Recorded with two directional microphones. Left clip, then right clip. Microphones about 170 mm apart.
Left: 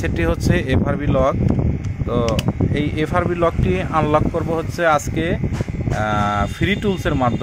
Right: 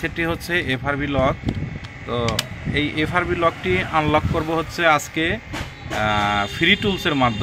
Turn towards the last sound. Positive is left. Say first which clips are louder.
# even
turn(degrees=25)  # may be behind; listen again after turning